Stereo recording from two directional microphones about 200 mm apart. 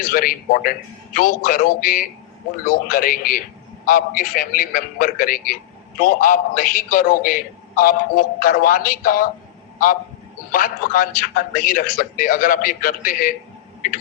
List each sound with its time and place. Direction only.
0.0 s a man's voice: 45° left (ahead or behind)
10.5 s a man's voice: 45° left (ahead or behind)